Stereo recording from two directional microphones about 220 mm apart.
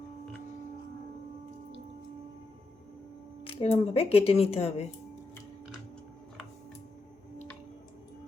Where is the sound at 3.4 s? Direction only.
25° left (ahead or behind).